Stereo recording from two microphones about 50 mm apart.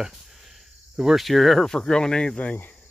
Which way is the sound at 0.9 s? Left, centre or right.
Centre.